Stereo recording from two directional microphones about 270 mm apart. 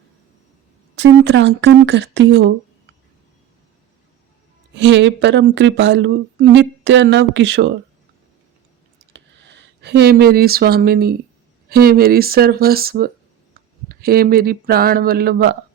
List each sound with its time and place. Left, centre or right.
0.9 s speech: right
4.7 s speech: right
9.1 s speech: right